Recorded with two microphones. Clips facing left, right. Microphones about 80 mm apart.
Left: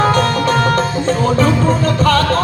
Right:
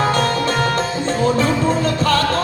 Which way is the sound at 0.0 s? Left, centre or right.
Left.